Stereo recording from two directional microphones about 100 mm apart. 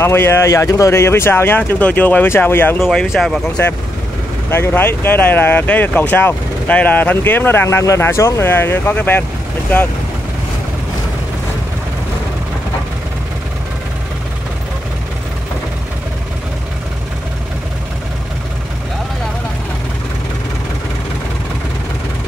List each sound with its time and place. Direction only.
0.0 s speech: 25° left (ahead or behind)
2.8 s speech: 5° left (ahead or behind)
4.5 s speech: 25° left (ahead or behind)